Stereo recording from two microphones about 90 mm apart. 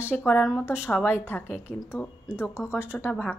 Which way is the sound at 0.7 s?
25° left (ahead or behind).